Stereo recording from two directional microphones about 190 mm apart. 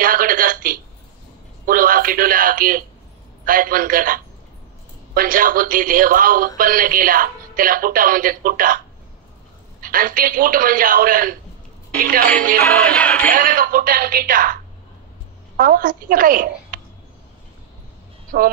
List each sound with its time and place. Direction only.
0.0 s a sound: 50° right (ahead or behind)
1.7 s speech: 50° right (ahead or behind)
12.9 s music: 5° left (ahead or behind)
13.3 s a woman's voice: 45° right (ahead or behind)
18.3 s speech: 50° right (ahead or behind)